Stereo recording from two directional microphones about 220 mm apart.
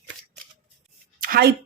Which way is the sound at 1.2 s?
40° right (ahead or behind).